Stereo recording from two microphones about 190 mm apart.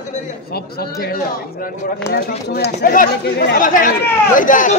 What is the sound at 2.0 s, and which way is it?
Speech, 60° left (ahead or behind).